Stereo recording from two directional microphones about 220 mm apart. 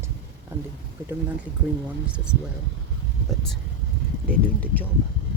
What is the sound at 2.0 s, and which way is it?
Speech, 5° right (ahead or behind).